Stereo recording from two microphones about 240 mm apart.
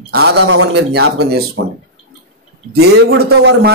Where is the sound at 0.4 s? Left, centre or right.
Right.